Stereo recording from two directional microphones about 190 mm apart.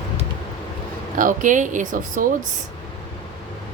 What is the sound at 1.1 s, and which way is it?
A woman's voice, 45° right (ahead or behind).